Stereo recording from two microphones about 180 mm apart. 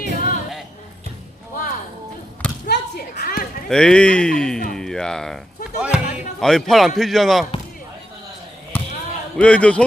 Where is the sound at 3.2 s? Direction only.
55° left (ahead or behind).